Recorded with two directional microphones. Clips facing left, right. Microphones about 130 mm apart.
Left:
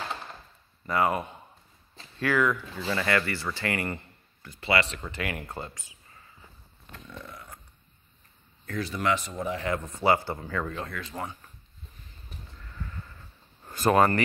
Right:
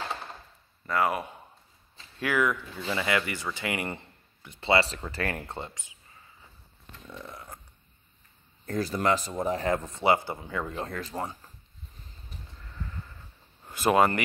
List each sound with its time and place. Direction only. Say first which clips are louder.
0.8 s speech: left 1 dB; centre (ahead or behind)
2.1 s speech: left 1 dB; 10° right (ahead or behind); by 5.4 s 35° right (ahead or behind)
5.5 s speech: even; 20° right (ahead or behind)
7.2 s speech: right 2 dB; 35° right (ahead or behind)
8.6 s speech: right 2 dB; 40° right (ahead or behind); by 10.8 s 20° right (ahead or behind)
10.8 s speech: right 2 dB; 35° right (ahead or behind)
13.7 s speech: left 1 dB; 15° right (ahead or behind)